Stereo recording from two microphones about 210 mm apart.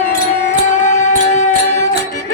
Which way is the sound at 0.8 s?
35° left (ahead or behind).